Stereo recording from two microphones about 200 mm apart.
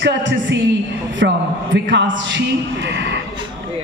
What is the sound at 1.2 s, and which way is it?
A man's voice, 55° right (ahead or behind).